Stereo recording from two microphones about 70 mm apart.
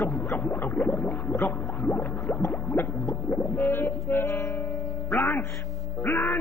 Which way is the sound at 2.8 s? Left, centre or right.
Left.